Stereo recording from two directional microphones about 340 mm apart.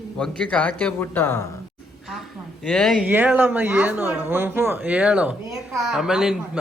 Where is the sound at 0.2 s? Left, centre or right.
Centre.